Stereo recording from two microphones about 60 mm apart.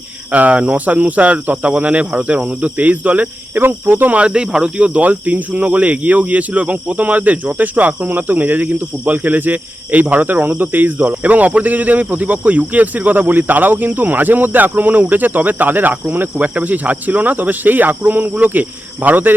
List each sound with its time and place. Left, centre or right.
0.3 s speech: right